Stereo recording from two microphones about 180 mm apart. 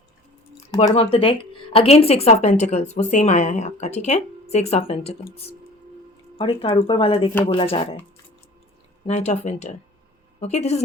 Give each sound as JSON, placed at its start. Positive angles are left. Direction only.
{"t": 0.9, "sound": "speech", "side_deg": 30}
{"t": 9.0, "sound": "speech", "side_deg": 40}